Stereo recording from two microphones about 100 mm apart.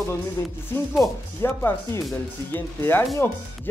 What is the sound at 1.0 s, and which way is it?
Speech, 25° left (ahead or behind).